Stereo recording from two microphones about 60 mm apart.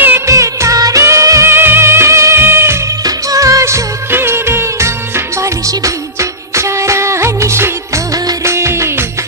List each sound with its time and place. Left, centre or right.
0.3 s music of bollywood: right
1.0 s music: right
1.5 s music: right
3.3 s music: right
4.1 s music: right
8.5 s music of bollywood: right